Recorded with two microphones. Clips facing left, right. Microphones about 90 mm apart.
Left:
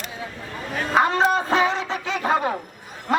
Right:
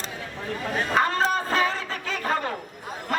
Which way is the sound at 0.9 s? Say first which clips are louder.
Left 5 dB; 15° left (ahead or behind).